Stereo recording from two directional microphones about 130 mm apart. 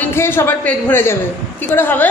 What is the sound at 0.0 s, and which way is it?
A man's voice, 20° left (ahead or behind).